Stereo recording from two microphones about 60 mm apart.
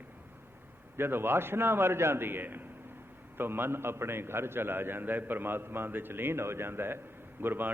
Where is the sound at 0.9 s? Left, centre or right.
Right.